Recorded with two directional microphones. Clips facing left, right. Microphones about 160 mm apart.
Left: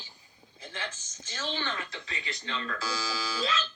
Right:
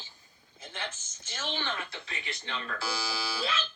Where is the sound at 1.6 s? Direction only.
25° right (ahead or behind).